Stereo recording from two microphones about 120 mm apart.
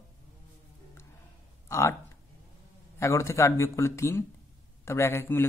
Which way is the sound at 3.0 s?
25° left (ahead or behind).